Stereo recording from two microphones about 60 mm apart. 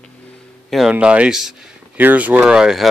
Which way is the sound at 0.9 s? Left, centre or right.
Right.